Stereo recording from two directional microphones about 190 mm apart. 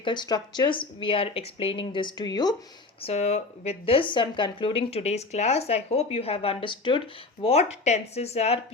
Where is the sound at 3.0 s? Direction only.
35° left (ahead or behind).